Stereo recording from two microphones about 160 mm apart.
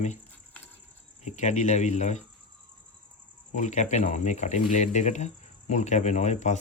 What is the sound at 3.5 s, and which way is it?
Speech, 50° left (ahead or behind).